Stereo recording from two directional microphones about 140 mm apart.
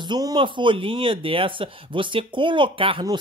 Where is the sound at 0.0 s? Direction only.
30° right (ahead or behind).